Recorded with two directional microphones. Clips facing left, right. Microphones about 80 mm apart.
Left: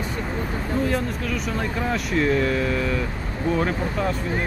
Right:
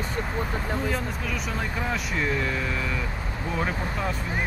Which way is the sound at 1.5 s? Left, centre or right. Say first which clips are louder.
Left 4 dB; centre.